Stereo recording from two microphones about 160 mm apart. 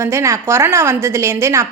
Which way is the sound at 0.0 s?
15° right (ahead or behind).